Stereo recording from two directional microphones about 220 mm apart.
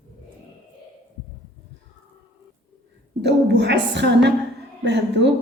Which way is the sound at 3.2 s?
50° right (ahead or behind).